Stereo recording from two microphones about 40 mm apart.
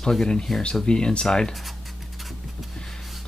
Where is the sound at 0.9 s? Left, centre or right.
Left.